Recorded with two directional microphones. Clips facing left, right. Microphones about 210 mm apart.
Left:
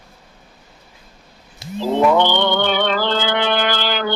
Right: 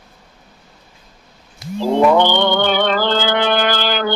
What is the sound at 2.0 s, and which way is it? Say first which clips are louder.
Music: right 2 dB; 45° right (ahead or behind).